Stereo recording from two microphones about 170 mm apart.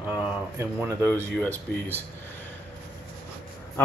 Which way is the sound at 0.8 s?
15° right (ahead or behind).